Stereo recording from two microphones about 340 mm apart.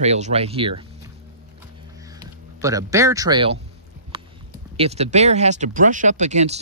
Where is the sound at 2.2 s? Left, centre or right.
Centre.